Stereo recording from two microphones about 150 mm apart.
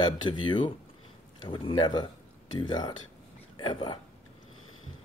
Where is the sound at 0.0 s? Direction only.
30° left (ahead or behind).